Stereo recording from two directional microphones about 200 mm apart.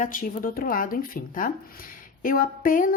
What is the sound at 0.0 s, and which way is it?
Speech, 45° left (ahead or behind).